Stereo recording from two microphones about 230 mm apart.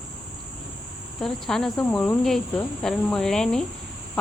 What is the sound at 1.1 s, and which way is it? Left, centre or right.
Speech, centre.